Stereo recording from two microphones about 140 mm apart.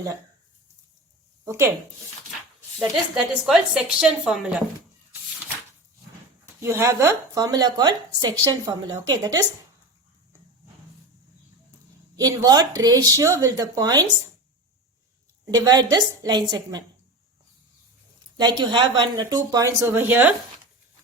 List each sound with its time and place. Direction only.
1.5 s speech: 20° right (ahead or behind)
2.9 s a woman's voice: centre (ahead or behind)
6.6 s speech: 20° right (ahead or behind)
12.1 s speech: 25° right (ahead or behind)
15.4 s speech: 30° right (ahead or behind)
18.3 s speech: 30° right (ahead or behind); by 20.3 s 15° right (ahead or behind)